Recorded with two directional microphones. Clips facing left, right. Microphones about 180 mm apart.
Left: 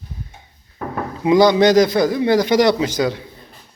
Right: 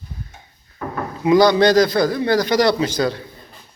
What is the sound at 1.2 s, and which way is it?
A man's voice, 20° left (ahead or behind).